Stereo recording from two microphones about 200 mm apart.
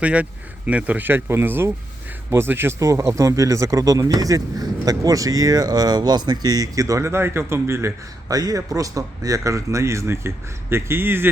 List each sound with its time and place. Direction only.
0.0 s speech: 5° right (ahead or behind)